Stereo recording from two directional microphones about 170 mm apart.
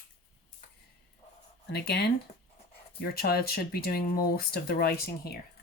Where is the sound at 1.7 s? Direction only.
70° left (ahead or behind).